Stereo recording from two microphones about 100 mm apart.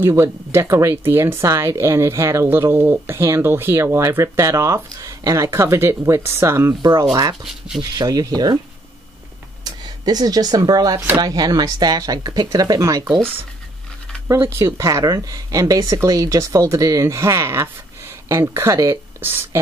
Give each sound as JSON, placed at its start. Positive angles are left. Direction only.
{"t": 0.0, "sound": "speech", "side_deg": -25}
{"t": 6.8, "sound": "speech", "side_deg": -40}
{"t": 7.4, "sound": "speech", "side_deg": -5}
{"t": 7.9, "sound": "speech", "side_deg": -40}
{"t": 9.7, "sound": "speech", "side_deg": -40}
{"t": 14.2, "sound": "speech", "side_deg": -25}